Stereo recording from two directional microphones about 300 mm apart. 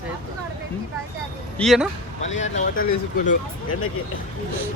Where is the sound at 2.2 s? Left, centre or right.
Left.